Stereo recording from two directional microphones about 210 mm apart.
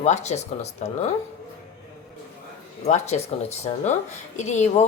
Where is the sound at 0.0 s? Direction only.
30° left (ahead or behind).